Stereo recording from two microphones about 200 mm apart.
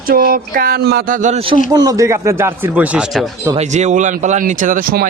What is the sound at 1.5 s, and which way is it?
Speech, 20° right (ahead or behind).